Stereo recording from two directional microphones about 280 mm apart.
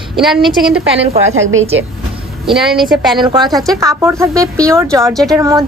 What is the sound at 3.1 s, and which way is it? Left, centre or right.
A woman's voice, centre.